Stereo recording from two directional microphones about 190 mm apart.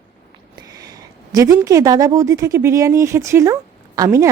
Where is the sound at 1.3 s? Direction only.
20° right (ahead or behind).